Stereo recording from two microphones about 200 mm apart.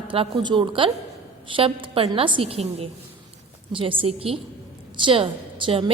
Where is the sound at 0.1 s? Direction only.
25° right (ahead or behind).